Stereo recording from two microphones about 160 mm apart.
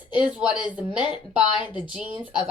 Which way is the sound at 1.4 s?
30° left (ahead or behind).